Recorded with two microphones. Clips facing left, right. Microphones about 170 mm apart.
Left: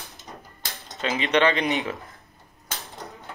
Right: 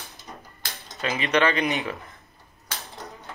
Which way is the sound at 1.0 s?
25° left (ahead or behind).